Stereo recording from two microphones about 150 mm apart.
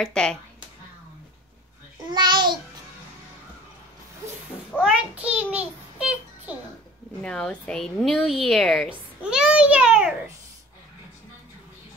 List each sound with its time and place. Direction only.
0.0 s a woman's voice: 5° left (ahead or behind)
2.0 s babbling: 30° right (ahead or behind)
4.8 s a sound: 10° right (ahead or behind)
7.2 s a woman's voice: 5° left (ahead or behind)